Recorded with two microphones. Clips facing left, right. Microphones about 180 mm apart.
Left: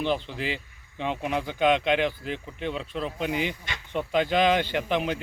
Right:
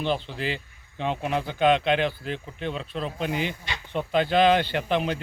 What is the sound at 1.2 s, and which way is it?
Speech, 15° left (ahead or behind).